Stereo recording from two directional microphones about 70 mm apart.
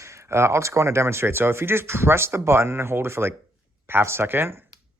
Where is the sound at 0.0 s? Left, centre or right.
Right.